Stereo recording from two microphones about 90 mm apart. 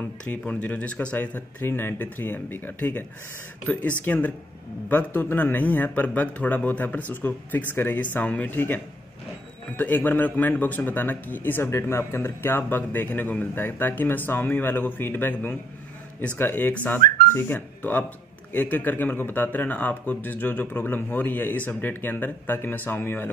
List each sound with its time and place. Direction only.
0.2 s speech: 15° left (ahead or behind)